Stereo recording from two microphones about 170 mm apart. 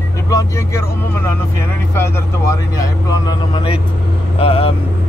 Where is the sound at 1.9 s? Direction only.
15° left (ahead or behind); by 4.7 s 35° left (ahead or behind).